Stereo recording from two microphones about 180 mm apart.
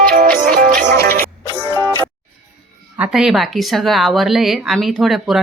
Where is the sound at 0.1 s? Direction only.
50° right (ahead or behind).